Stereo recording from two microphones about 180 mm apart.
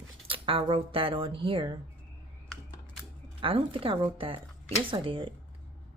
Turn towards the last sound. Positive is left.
turn(degrees=-30)  # may be behind; listen again after turning